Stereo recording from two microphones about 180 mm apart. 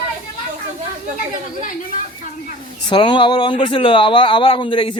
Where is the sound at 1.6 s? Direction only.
45° left (ahead or behind).